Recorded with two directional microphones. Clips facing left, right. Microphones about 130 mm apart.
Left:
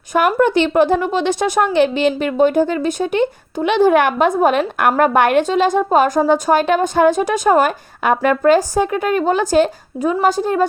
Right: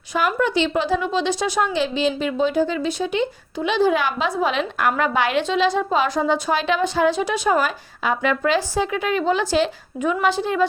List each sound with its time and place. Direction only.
0.1 s speech: 55° left (ahead or behind)